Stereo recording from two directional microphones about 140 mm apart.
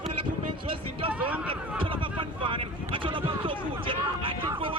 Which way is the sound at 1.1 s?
10° right (ahead or behind).